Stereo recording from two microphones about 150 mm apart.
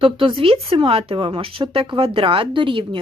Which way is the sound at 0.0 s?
35° right (ahead or behind).